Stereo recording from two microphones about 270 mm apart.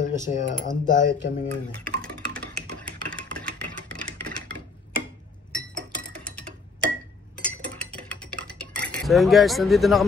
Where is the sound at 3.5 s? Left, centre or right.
Centre.